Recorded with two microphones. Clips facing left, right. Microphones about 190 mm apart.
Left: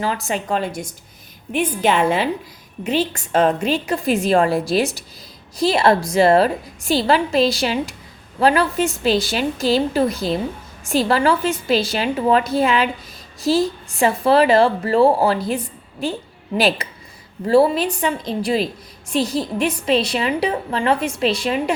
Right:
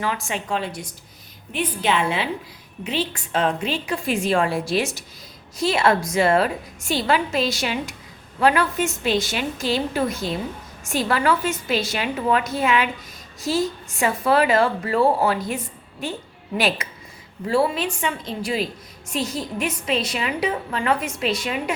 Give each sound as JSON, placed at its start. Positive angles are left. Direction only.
{"t": 0.0, "sound": "a woman's voice", "side_deg": 35}